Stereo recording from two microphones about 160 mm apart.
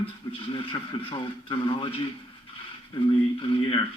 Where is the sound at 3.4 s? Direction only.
35° left (ahead or behind).